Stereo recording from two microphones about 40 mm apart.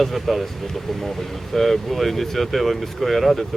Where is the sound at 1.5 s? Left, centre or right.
Centre.